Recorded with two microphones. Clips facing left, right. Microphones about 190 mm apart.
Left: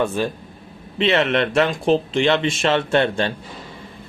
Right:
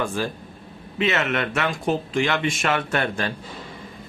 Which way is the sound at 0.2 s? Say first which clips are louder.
Left 4 dB; 20° left (ahead or behind).